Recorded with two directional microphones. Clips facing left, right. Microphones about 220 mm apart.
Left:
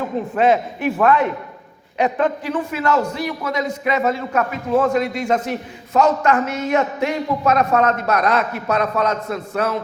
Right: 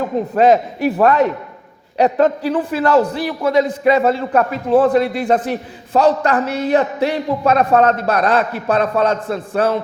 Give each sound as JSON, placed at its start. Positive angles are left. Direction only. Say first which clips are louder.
{"t": 0.3, "sound": "a man's voice", "louder": "right 4 dB", "side_deg": -40}